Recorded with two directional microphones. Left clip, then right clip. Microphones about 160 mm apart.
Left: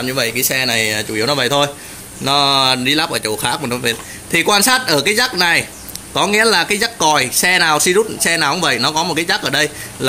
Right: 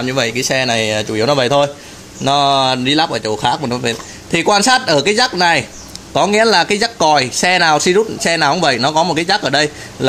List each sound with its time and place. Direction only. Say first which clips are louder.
0.0 s speech: right 1 dB; 55° right (ahead or behind)